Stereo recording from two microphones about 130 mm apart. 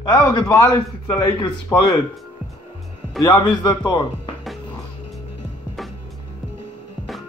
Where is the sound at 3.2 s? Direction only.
35° left (ahead or behind).